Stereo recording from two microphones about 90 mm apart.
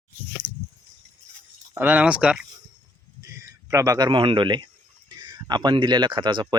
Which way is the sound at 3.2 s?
35° right (ahead or behind).